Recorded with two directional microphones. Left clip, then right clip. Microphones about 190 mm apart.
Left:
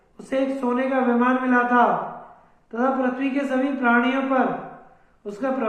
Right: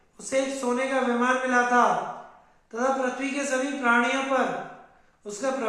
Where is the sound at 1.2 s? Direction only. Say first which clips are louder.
Left 2 dB; 30° left (ahead or behind).